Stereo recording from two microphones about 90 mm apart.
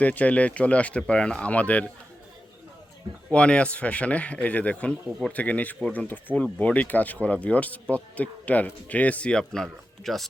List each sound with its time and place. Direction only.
0.0 s speech: 15° left (ahead or behind)
3.3 s speech: 15° left (ahead or behind)